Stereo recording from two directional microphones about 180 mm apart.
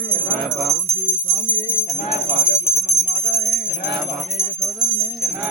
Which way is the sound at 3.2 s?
65° left (ahead or behind).